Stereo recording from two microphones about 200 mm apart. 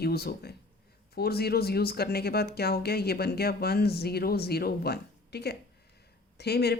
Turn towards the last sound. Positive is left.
turn(degrees=55)  # may be behind; listen again after turning